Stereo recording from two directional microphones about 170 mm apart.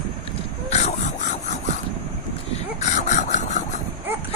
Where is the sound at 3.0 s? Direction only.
45° left (ahead or behind).